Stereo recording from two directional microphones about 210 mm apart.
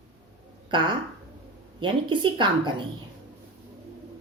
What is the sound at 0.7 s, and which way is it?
Speech, 20° right (ahead or behind).